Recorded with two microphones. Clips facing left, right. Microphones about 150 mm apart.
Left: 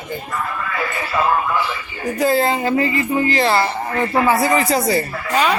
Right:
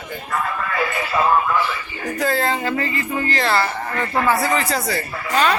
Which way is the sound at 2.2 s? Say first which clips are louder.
Left 4 dB; 10° left (ahead or behind).